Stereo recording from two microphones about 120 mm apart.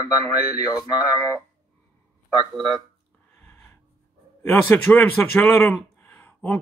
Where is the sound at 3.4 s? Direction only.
15° left (ahead or behind).